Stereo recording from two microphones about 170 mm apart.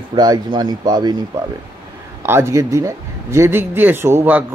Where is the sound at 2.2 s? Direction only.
15° right (ahead or behind).